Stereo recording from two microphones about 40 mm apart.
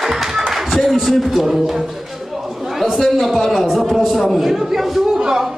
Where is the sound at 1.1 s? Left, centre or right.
Centre.